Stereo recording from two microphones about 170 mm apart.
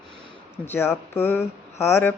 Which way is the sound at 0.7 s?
10° left (ahead or behind).